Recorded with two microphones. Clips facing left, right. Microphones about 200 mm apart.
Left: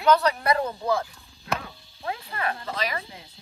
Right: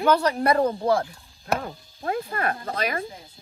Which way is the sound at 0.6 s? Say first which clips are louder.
Right 5 dB; 30° right (ahead or behind).